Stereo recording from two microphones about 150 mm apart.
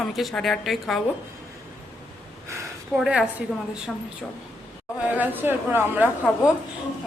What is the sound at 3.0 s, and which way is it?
Speech, 5° right (ahead or behind).